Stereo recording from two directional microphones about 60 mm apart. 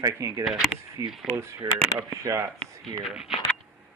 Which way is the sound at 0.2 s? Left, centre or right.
Right.